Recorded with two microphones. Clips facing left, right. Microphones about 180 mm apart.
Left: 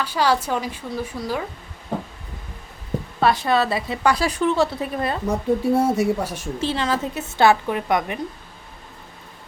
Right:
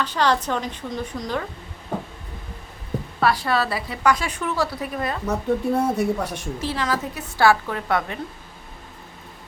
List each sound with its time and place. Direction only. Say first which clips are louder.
0.0 s speech: left 1 dB; 10° left (ahead or behind)
3.2 s a woman's voice: left 2 dB; 20° left (ahead or behind)
5.3 s speech: left 2 dB; 10° left (ahead or behind)
6.6 s a woman's voice: left 3 dB; 25° left (ahead or behind)